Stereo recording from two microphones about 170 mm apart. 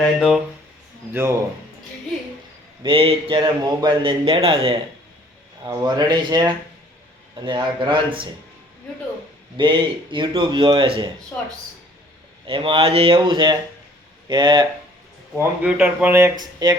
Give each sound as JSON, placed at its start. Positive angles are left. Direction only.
{"t": 0.2, "sound": "speech", "side_deg": 0}
{"t": 2.8, "sound": "a man's voice", "side_deg": -30}
{"t": 9.6, "sound": "a man's voice", "side_deg": -30}
{"t": 12.5, "sound": "a man's voice", "side_deg": -30}
{"t": 15.4, "sound": "speech", "side_deg": -5}
{"t": 16.4, "sound": "a man's voice", "side_deg": -25}